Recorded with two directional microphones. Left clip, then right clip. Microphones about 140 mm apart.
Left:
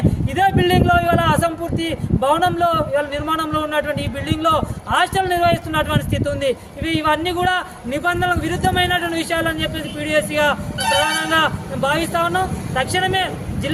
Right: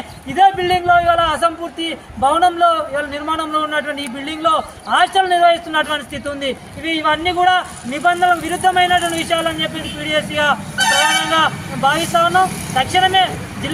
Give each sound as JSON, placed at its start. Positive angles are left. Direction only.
{"t": 0.3, "sound": "speech", "side_deg": 35}